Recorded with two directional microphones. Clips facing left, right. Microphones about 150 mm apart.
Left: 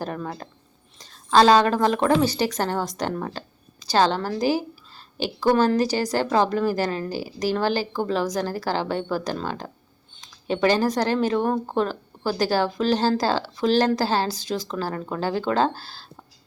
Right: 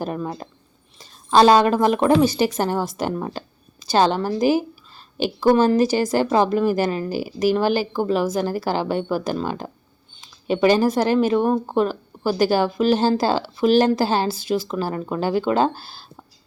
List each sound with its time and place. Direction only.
0.0 s speech: 15° right (ahead or behind)